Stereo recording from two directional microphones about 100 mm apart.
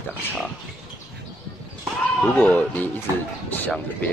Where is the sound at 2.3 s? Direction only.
15° left (ahead or behind).